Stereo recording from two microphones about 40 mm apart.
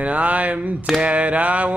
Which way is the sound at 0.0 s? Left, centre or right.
Right.